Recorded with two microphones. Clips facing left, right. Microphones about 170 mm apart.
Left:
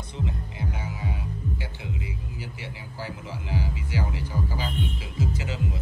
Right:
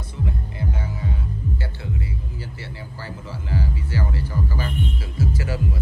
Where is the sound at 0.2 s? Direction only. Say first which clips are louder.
Right 4 dB; 15° left (ahead or behind).